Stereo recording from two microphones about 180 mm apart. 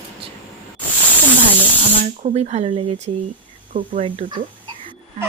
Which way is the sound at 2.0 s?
40° right (ahead or behind).